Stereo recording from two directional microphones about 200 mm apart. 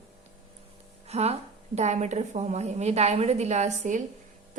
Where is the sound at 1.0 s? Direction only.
30° right (ahead or behind).